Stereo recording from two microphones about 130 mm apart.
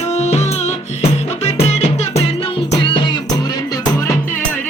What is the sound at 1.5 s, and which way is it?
Music, 55° left (ahead or behind).